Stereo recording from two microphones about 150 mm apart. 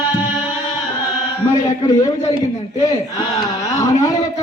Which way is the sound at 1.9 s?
25° left (ahead or behind).